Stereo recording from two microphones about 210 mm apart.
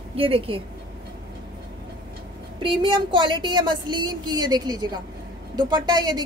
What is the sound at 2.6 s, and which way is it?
A woman's voice, 20° right (ahead or behind).